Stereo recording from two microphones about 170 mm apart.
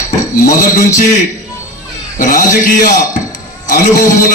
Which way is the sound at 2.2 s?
55° left (ahead or behind).